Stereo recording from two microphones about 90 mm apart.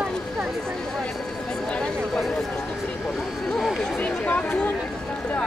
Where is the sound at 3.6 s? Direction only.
Centre (ahead or behind).